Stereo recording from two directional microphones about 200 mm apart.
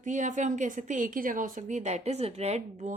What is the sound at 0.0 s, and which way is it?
Speech, 40° right (ahead or behind).